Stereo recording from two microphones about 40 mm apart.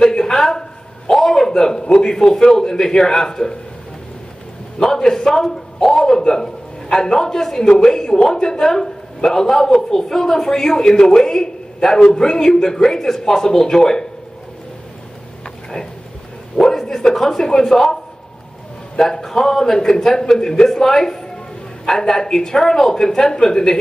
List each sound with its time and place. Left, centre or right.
0.0 s speech: centre
4.7 s speech: centre
16.5 s speech: centre
18.9 s speech: centre